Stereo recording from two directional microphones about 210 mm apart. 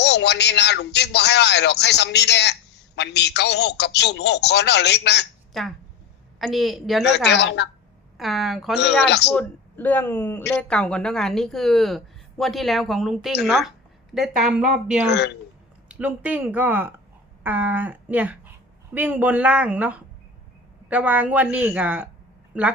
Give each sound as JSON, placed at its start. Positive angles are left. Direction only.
{"t": 0.0, "sound": "a man's voice", "side_deg": 55}
{"t": 6.4, "sound": "a woman's voice", "side_deg": 0}
{"t": 7.3, "sound": "a woman's voice", "side_deg": 55}
{"t": 8.2, "sound": "a woman's voice", "side_deg": 0}
{"t": 8.8, "sound": "a man's voice", "side_deg": 55}
{"t": 9.3, "sound": "a man's voice", "side_deg": 10}
{"t": 15.9, "sound": "a woman's voice", "side_deg": -5}